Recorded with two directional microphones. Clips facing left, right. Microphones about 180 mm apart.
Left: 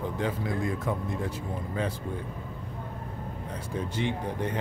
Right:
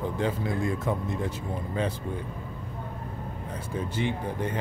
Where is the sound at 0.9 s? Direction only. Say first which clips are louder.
Right 2 dB; 25° right (ahead or behind).